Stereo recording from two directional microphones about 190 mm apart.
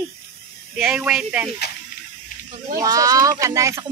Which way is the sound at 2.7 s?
20° right (ahead or behind).